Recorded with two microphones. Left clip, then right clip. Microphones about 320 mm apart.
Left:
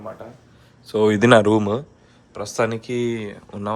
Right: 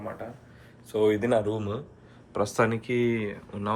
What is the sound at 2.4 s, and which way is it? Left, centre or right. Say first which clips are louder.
Speech: left 2 dB; centre.